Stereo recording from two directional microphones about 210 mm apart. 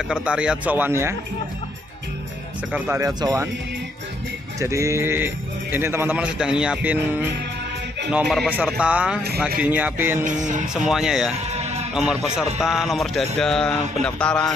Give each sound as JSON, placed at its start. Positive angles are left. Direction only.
{"t": 0.1, "sound": "speech", "side_deg": -5}
{"t": 2.7, "sound": "speech", "side_deg": -10}
{"t": 4.6, "sound": "speech", "side_deg": -15}
{"t": 8.1, "sound": "a sound", "side_deg": 0}
{"t": 9.6, "sound": "speech", "side_deg": -5}
{"t": 10.2, "sound": "music", "side_deg": -35}
{"t": 10.7, "sound": "a sound", "side_deg": -5}